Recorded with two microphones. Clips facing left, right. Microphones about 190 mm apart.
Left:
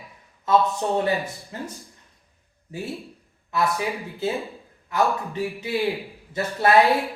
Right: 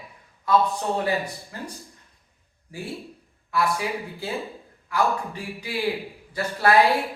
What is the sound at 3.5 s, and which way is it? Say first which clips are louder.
A man's voice: left 1 dB; 20° left (ahead or behind).